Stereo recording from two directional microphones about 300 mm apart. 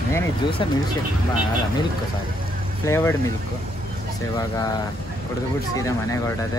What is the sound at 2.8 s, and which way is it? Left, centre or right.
Speech, centre.